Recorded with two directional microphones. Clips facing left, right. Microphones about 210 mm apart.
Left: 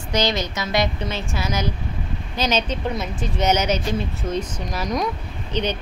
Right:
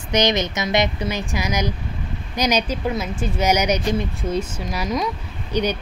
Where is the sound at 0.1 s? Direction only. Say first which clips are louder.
Right 3 dB; 20° right (ahead or behind).